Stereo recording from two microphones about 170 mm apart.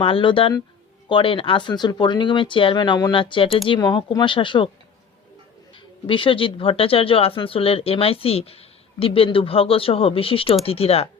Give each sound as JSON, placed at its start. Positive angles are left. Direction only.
{"t": 0.0, "sound": "speech", "side_deg": 30}
{"t": 6.1, "sound": "speech", "side_deg": 30}